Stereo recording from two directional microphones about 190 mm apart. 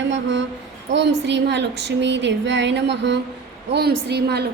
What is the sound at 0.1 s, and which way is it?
Speech, 70° right (ahead or behind).